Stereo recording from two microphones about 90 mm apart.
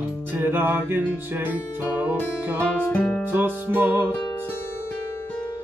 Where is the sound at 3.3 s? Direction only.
20° right (ahead or behind).